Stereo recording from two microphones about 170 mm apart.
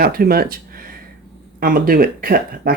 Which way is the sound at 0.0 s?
60° right (ahead or behind).